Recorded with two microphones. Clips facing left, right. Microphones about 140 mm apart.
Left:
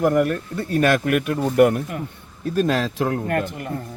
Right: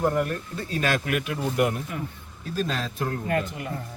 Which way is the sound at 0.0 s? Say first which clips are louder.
Left 6 dB; 70° left (ahead or behind).